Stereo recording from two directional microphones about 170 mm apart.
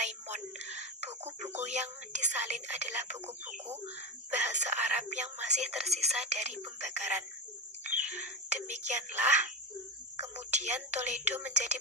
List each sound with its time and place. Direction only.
0.0 s whispering: 40° right (ahead or behind)
1.2 s speech: 40° right (ahead or behind)